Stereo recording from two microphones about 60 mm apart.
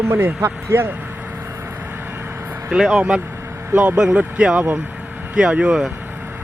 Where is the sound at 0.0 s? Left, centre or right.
Right.